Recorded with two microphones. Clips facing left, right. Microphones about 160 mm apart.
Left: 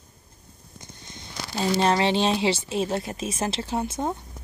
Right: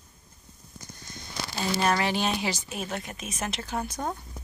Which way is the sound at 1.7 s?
25° left (ahead or behind).